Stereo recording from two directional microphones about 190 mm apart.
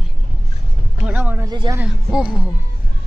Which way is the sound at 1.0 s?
10° right (ahead or behind).